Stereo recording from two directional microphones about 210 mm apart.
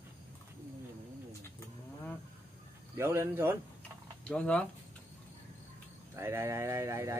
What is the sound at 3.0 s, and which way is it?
Speech, 10° right (ahead or behind).